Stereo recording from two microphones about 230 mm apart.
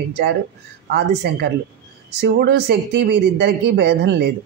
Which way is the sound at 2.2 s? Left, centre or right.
Right.